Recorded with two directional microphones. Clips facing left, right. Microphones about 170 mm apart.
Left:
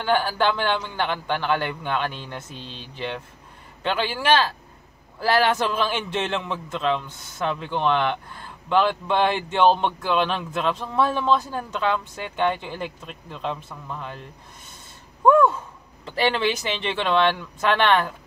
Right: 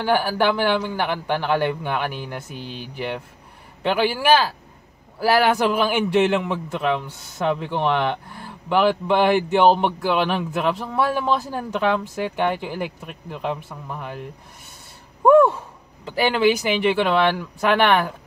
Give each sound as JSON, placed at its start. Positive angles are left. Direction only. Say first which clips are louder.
{"t": 0.0, "sound": "a man's voice", "louder": "right 2 dB", "side_deg": -15}
{"t": 3.8, "sound": "a man's voice", "louder": "right 4 dB", "side_deg": -15}
{"t": 15.2, "sound": "gasp", "louder": "right 3 dB", "side_deg": -20}
{"t": 16.2, "sound": "a man's voice", "louder": "right 4 dB", "side_deg": -10}